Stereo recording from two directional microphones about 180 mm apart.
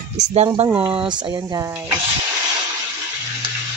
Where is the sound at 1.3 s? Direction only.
20° right (ahead or behind).